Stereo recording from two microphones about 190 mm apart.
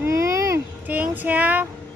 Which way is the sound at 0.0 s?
15° right (ahead or behind).